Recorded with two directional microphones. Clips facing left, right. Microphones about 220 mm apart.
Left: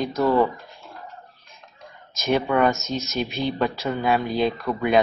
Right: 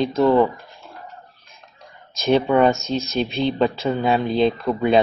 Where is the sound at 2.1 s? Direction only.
30° right (ahead or behind).